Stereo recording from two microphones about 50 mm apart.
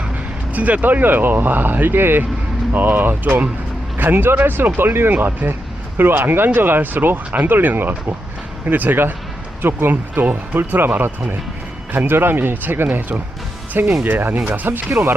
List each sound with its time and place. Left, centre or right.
0.5 s speech: right